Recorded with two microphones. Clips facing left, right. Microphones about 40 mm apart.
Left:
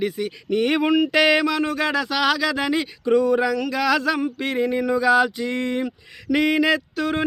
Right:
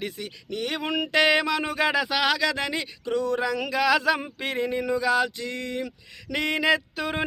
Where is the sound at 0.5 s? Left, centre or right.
Left.